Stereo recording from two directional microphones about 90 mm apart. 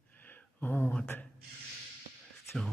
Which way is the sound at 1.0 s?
25° left (ahead or behind).